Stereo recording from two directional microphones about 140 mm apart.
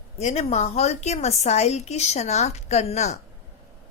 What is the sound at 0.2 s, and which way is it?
A woman's voice, 55° left (ahead or behind).